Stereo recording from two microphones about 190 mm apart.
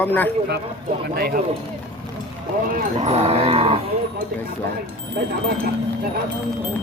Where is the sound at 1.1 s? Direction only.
50° right (ahead or behind).